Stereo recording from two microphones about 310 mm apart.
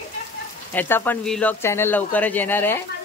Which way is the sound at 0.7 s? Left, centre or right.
Centre.